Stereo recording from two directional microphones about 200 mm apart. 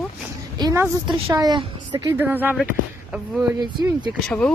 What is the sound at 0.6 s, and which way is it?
Speech, 20° right (ahead or behind).